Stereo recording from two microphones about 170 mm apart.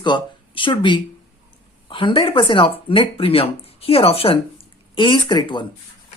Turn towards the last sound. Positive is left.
turn(degrees=25)  # may be behind; listen again after turning